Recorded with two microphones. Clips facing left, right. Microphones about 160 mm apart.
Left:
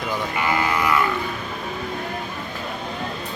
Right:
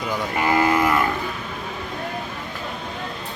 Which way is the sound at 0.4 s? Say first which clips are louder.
Right 4 dB; 40° right (ahead or behind).